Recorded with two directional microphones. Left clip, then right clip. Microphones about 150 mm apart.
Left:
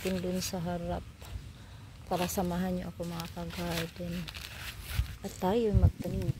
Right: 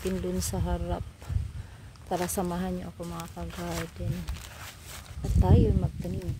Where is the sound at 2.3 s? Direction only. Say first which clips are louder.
Right 2 dB; 15° right (ahead or behind).